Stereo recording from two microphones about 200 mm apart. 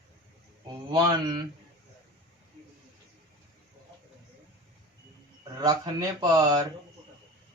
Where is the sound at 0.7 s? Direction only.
20° right (ahead or behind).